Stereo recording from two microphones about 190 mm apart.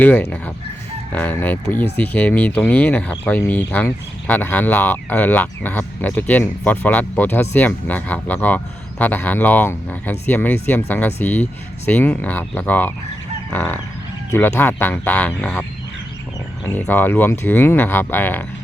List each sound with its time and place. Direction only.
0.0 s speech: 10° left (ahead or behind)
16.6 s speech: 10° left (ahead or behind)